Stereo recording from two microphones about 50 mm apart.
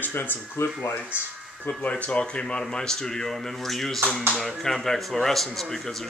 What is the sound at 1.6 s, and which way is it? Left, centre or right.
Speech, left.